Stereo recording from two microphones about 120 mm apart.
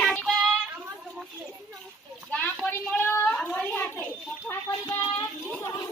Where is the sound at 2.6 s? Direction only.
15° left (ahead or behind).